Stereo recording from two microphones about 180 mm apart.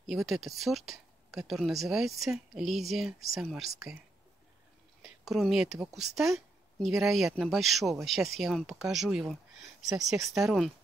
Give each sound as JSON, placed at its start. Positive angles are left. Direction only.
{"t": 0.0, "sound": "speech", "side_deg": 0}
{"t": 5.0, "sound": "speech", "side_deg": 0}